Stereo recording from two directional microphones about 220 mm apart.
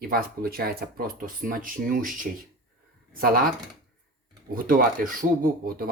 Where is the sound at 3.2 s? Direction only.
40° right (ahead or behind).